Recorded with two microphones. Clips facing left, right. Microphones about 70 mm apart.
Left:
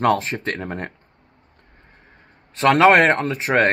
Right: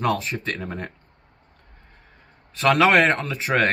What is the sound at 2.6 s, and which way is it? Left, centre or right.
Speech, left.